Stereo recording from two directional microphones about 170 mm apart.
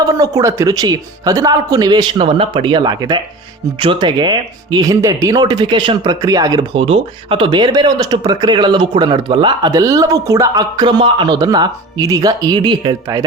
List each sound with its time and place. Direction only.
0.1 s speech: 20° right (ahead or behind)
6.7 s speech: 35° right (ahead or behind)